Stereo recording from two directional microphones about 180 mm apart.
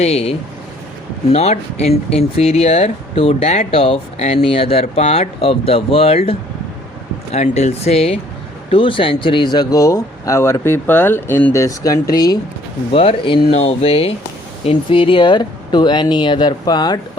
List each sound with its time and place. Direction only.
0.0 s speech: 35° left (ahead or behind)
7.3 s speech: 35° left (ahead or behind)